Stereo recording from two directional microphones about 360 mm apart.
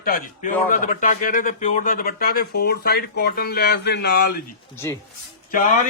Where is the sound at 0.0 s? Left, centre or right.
Left.